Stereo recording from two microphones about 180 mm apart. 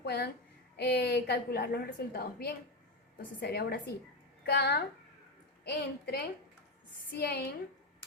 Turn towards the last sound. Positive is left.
turn(degrees=60)  # may be behind; listen again after turning